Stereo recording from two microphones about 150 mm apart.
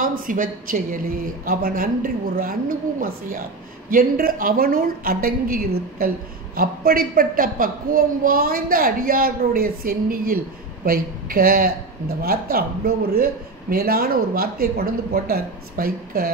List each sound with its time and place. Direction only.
0.0 s a woman's voice: 65° right (ahead or behind)
12.2 s a man's voice: 90° right